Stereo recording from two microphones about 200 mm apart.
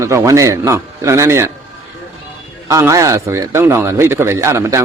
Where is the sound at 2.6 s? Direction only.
15° right (ahead or behind).